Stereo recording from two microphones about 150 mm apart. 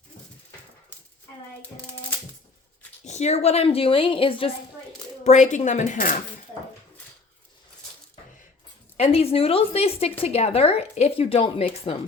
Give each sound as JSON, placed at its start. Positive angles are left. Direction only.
{"t": 3.0, "sound": "speech", "side_deg": 50}
{"t": 5.2, "sound": "speech", "side_deg": 55}
{"t": 9.0, "sound": "speech", "side_deg": 40}